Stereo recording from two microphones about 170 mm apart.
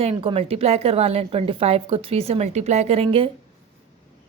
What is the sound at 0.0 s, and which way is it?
A woman's voice, 35° right (ahead or behind).